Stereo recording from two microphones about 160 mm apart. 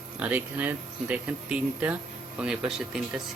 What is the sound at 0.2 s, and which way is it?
Speech, 10° right (ahead or behind).